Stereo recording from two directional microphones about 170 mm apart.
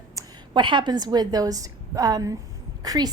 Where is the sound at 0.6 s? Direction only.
30° right (ahead or behind).